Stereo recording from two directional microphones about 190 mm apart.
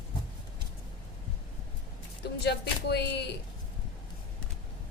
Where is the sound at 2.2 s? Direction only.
60° left (ahead or behind).